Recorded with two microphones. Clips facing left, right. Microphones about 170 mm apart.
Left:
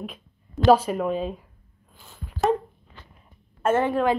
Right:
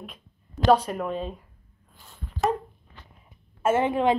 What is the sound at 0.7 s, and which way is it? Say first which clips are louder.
Speech: left 3 dB; 5° left (ahead or behind).